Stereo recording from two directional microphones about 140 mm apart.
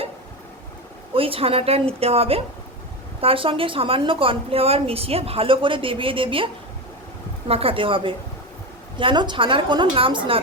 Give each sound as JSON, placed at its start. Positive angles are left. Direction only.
{"t": 1.1, "sound": "a woman's voice", "side_deg": -40}